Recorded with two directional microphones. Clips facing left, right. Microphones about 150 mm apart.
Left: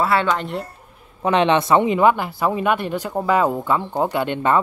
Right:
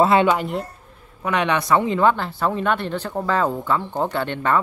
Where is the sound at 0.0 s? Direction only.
20° right (ahead or behind).